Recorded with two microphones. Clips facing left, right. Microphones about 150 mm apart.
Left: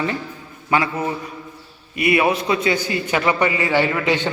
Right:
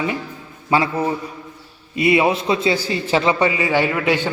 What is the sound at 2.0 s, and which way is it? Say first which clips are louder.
A man's voice: right 2 dB; 25° right (ahead or behind).